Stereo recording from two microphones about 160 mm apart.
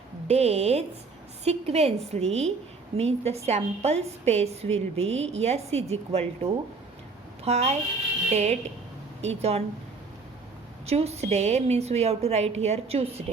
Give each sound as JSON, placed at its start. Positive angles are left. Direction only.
{"t": 0.3, "sound": "a woman's voice", "side_deg": -40}
{"t": 10.8, "sound": "a woman's voice", "side_deg": -40}